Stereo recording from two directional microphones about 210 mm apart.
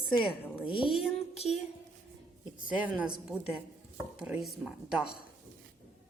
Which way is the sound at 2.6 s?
5° right (ahead or behind).